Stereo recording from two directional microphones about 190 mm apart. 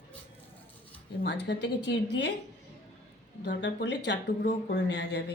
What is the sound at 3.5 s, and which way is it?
Speech, 65° left (ahead or behind).